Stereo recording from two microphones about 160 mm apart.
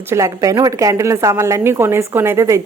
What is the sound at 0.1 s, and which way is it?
A woman's voice, 20° right (ahead or behind).